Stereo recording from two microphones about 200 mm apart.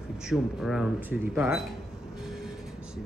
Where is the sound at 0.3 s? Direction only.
Centre (ahead or behind).